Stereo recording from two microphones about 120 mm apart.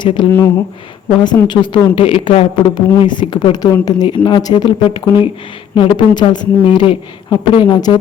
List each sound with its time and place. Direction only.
0.0 s a woman's voice: 40° left (ahead or behind)